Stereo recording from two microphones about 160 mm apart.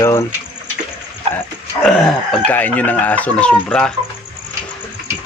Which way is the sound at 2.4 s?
10° left (ahead or behind).